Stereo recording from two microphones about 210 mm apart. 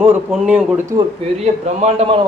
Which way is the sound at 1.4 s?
30° right (ahead or behind).